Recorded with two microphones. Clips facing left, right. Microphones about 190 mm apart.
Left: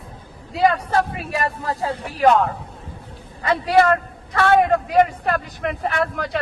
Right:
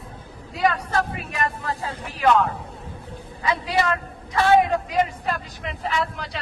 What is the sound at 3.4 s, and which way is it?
A man's voice, 55° left (ahead or behind).